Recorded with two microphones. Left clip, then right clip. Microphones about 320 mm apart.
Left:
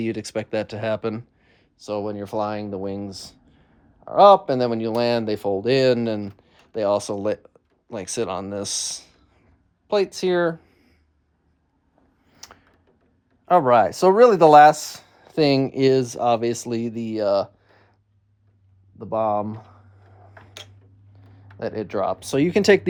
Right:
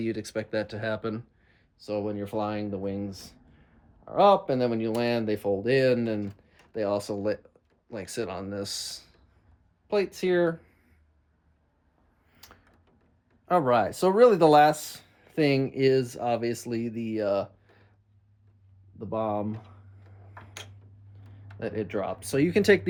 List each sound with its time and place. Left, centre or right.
0.0 s speech: left
12.3 s a sound: centre
13.4 s speech: centre
18.9 s speech: centre
21.6 s speech: centre